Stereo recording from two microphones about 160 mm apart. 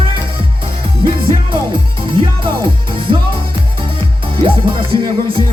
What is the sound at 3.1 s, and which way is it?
Music, 30° right (ahead or behind).